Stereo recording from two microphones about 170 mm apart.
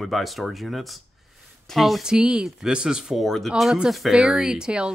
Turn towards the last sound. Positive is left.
turn(degrees=-5)  # may be behind; listen again after turning